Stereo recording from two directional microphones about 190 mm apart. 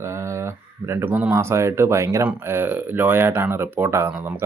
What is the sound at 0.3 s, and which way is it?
Speech, 15° right (ahead or behind).